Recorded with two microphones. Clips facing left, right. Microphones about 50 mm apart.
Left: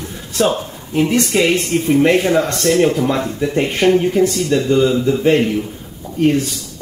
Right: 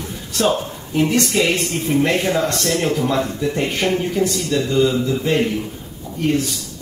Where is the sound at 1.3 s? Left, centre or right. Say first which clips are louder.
Left 4 dB; centre.